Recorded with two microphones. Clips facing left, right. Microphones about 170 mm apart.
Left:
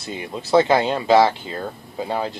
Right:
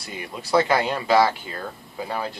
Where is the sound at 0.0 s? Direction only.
25° left (ahead or behind).